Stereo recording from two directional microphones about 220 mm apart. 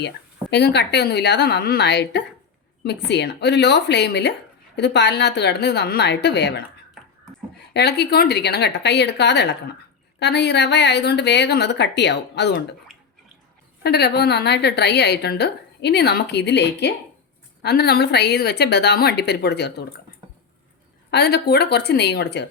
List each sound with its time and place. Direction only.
0.5 s a woman's voice: 50° left (ahead or behind)
7.7 s a woman's voice: 50° left (ahead or behind)
13.8 s a woman's voice: 45° left (ahead or behind)
21.1 s a woman's voice: 50° left (ahead or behind)